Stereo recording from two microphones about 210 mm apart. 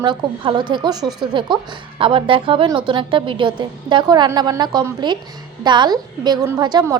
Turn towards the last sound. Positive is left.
turn(degrees=-20)  # may be behind; listen again after turning